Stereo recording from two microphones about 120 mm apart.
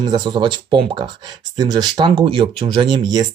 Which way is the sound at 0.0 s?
35° right (ahead or behind).